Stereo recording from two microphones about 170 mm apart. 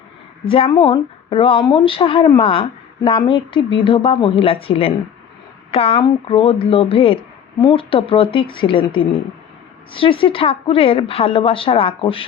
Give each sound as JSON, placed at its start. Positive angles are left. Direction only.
{"t": 0.4, "sound": "a woman's voice", "side_deg": 30}